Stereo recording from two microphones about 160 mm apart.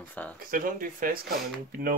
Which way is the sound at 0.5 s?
60° right (ahead or behind).